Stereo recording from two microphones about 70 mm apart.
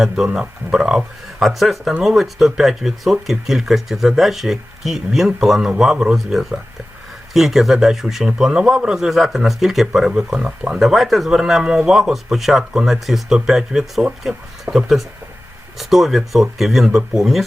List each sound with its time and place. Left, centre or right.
0.0 s speech: centre
10.8 s speech: centre